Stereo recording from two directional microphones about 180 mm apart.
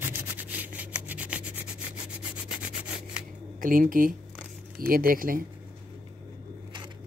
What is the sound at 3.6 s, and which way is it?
Speech, 50° right (ahead or behind).